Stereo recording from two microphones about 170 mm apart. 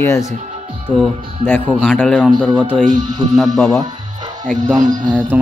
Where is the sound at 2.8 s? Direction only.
50° right (ahead or behind).